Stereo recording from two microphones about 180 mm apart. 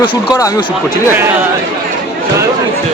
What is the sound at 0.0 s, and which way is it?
Speech, 25° left (ahead or behind).